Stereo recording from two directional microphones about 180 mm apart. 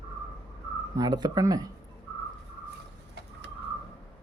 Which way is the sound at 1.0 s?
20° right (ahead or behind).